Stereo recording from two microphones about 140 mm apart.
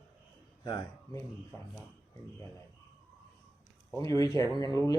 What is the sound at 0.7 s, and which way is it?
Speech, 30° left (ahead or behind).